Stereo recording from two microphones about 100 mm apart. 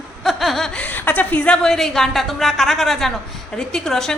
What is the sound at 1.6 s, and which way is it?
A woman's voice, 5° left (ahead or behind).